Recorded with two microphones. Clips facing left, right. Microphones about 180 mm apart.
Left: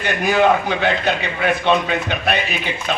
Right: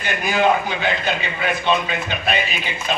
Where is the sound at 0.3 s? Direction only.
60° left (ahead or behind).